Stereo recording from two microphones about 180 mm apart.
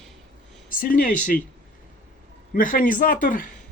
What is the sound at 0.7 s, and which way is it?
Speech, 50° left (ahead or behind).